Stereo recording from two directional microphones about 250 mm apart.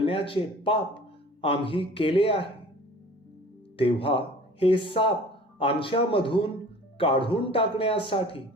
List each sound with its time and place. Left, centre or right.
0.0 s speech: left
3.8 s speech: left